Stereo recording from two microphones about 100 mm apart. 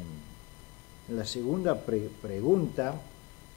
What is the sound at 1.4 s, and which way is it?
Speech, 20° left (ahead or behind).